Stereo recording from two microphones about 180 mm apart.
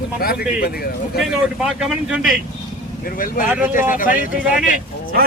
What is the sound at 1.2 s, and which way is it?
Speech, 5° right (ahead or behind).